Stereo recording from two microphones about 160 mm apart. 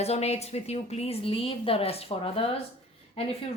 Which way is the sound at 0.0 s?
40° left (ahead or behind).